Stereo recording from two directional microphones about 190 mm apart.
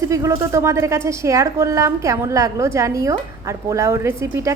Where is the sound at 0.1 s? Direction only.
15° right (ahead or behind).